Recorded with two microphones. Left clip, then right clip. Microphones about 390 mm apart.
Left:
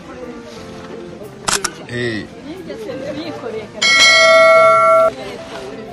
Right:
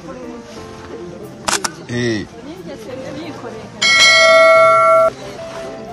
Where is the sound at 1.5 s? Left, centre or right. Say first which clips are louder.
Even; centre.